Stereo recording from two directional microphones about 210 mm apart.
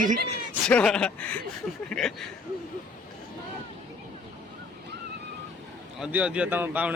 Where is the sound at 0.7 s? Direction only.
5° left (ahead or behind).